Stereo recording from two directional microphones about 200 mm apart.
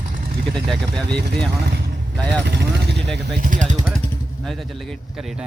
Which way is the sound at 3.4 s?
40° right (ahead or behind).